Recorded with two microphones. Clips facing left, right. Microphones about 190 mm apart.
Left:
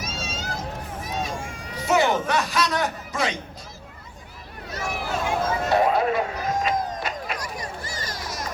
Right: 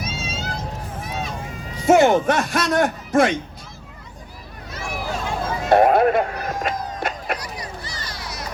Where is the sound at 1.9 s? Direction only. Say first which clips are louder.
Right 7 dB; 50° right (ahead or behind).